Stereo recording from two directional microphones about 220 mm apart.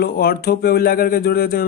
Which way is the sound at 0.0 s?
45° left (ahead or behind).